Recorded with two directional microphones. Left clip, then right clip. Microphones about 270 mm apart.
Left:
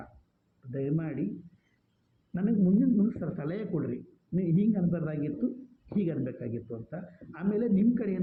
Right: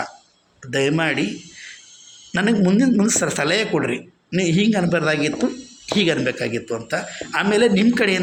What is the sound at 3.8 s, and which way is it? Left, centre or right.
Speech, right.